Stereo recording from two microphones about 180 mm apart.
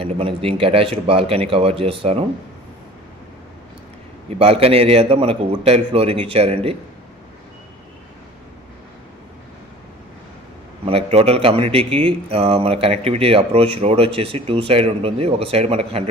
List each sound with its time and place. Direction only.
0.0 s a man's voice: 30° right (ahead or behind)
4.4 s a man's voice: 35° right (ahead or behind)
10.8 s a man's voice: 35° right (ahead or behind)